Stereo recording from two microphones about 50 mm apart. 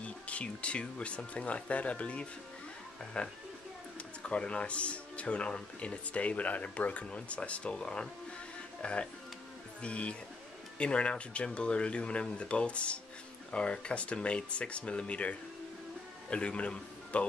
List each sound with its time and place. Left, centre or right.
0.0 s a man's voice: left